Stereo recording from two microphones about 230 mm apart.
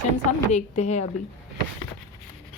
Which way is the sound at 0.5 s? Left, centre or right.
Left.